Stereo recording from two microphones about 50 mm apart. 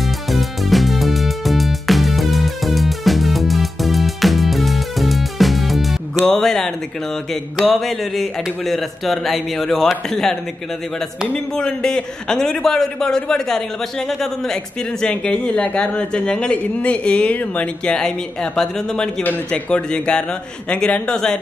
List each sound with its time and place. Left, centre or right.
0.0 s music: centre
6.2 s a man's voice: centre
11.5 s a man's voice: centre
17.8 s a man's voice: centre